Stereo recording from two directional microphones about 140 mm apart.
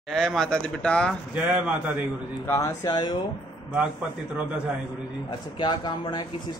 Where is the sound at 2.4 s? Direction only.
20° left (ahead or behind).